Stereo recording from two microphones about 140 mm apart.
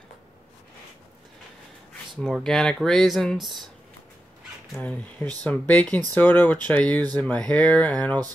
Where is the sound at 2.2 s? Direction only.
Centre (ahead or behind).